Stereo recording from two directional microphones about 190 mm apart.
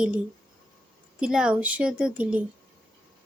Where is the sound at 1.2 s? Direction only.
5° right (ahead or behind).